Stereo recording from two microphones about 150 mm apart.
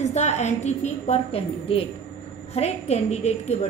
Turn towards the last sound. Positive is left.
turn(degrees=45)  # may be behind; listen again after turning